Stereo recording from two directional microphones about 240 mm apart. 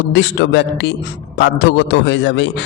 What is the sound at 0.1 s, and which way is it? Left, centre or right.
A man's voice, left.